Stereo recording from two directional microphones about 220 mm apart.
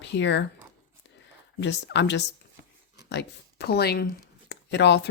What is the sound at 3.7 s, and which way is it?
Speech, 45° left (ahead or behind).